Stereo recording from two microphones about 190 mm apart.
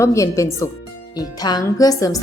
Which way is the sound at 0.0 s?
15° left (ahead or behind).